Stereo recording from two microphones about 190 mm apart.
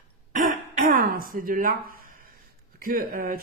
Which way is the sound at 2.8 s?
50° right (ahead or behind).